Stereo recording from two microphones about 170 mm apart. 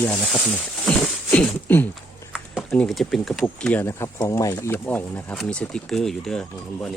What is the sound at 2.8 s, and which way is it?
Speech, centre (ahead or behind).